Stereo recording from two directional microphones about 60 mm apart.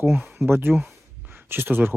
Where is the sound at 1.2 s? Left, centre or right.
Right.